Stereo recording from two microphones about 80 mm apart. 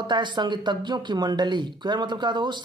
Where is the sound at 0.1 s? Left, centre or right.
Right.